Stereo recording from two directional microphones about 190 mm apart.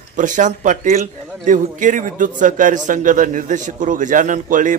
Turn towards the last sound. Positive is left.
turn(degrees=-45)  # may be behind; listen again after turning